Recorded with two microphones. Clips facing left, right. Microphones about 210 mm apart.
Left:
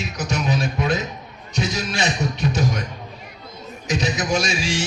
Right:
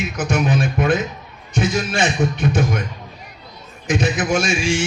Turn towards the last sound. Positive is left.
turn(degrees=-55)  # may be behind; listen again after turning